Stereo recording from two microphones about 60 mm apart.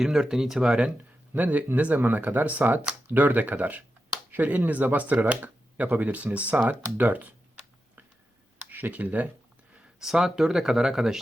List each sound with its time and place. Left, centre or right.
0.0 s speech: centre
1.7 s speech: right
8.7 s speech: right
10.0 s speech: centre